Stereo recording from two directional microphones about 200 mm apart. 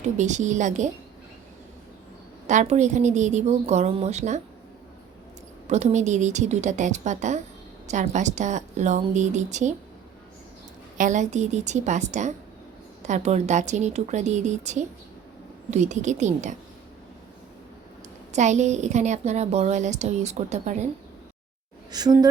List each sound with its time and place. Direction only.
0.2 s a woman's voice: 35° right (ahead or behind)
2.5 s a woman's voice: 35° right (ahead or behind)
5.6 s a woman's voice: 35° right (ahead or behind)
10.9 s a woman's voice: 40° right (ahead or behind)
18.3 s a woman's voice: 35° right (ahead or behind)
21.9 s a woman's voice: 20° right (ahead or behind)